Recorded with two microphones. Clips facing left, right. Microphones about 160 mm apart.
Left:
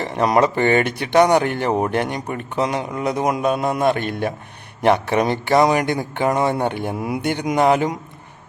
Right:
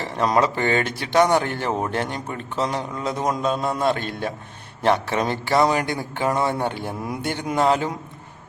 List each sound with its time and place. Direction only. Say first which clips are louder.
0.0 s speech: left 3 dB; 15° left (ahead or behind)
3.9 s a man's voice: left 5 dB; 55° left (ahead or behind)
4.8 s speech: left 4 dB; 15° left (ahead or behind)